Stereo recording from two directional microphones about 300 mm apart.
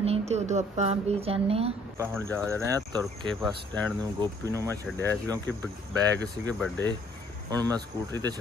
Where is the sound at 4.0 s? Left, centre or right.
Centre.